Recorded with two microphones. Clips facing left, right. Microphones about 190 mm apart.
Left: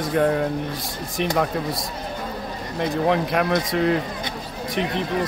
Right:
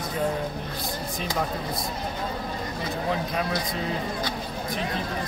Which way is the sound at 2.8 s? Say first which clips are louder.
Left 9 dB; 70° left (ahead or behind).